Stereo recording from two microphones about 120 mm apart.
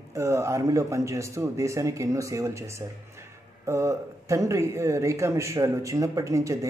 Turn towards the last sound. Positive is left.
turn(degrees=-25)  # may be behind; listen again after turning